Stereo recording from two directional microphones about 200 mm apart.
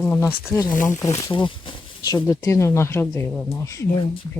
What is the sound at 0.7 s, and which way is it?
Speech, 40° left (ahead or behind).